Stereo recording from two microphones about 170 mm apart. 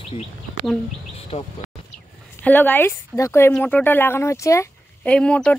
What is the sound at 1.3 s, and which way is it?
Speech, 40° left (ahead or behind).